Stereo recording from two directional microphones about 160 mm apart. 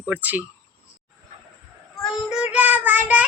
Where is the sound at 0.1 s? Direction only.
10° right (ahead or behind).